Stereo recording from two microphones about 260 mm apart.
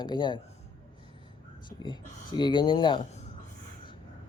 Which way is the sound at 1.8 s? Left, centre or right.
Centre.